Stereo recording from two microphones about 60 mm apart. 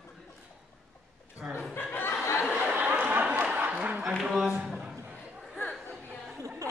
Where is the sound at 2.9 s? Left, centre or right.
Right.